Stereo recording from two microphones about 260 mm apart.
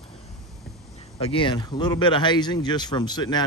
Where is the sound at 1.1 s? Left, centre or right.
Left.